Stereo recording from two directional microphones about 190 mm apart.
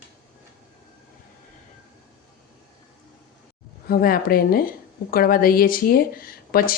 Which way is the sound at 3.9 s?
50° left (ahead or behind).